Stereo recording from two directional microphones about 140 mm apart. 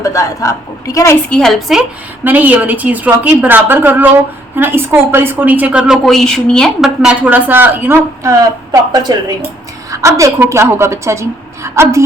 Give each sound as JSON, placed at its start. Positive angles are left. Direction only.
{"t": 0.0, "sound": "speech", "side_deg": 20}
{"t": 1.3, "sound": "a woman's voice", "side_deg": 5}
{"t": 2.2, "sound": "a woman's voice", "side_deg": -10}